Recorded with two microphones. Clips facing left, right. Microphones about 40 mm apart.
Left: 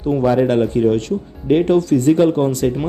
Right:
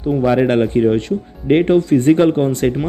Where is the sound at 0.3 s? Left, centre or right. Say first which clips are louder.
Right 1 dB; right.